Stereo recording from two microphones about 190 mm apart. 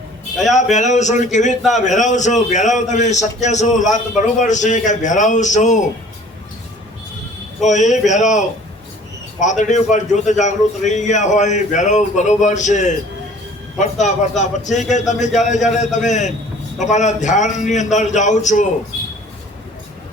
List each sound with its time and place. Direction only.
0.5 s a man's voice: 40° left (ahead or behind)
7.6 s a man's voice: 40° left (ahead or behind)